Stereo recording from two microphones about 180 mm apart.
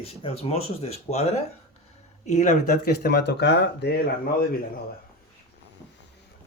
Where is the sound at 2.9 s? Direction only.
65° left (ahead or behind).